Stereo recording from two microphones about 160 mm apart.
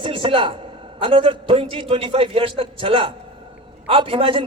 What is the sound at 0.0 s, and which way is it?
A man's voice, 35° right (ahead or behind).